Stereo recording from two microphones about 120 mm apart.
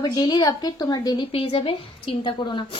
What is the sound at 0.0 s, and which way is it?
A woman's voice, 35° left (ahead or behind).